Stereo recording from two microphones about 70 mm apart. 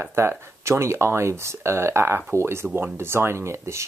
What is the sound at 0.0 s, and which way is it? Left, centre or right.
Speech, right.